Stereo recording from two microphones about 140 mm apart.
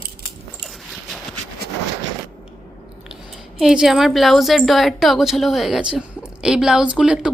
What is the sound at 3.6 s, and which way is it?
A woman's voice, 5° right (ahead or behind).